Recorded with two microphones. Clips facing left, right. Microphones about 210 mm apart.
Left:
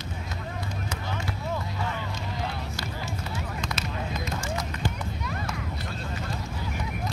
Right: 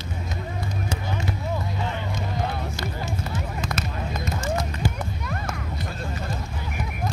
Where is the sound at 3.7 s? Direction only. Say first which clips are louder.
Right 3 dB; 50° right (ahead or behind).